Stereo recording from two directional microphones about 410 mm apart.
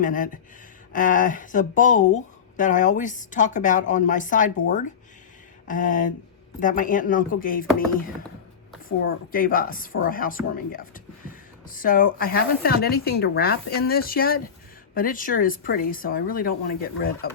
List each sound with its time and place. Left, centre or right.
0.0 s speech: centre
9.0 s speech: left